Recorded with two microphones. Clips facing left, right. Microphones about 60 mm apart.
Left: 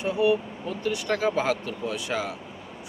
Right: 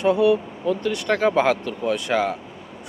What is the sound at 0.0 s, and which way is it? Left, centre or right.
Speech, right.